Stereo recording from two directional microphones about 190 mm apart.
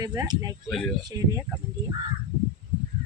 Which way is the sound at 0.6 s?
Centre (ahead or behind).